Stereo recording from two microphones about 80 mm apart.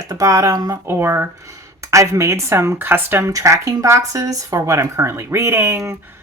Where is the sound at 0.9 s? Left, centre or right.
Right.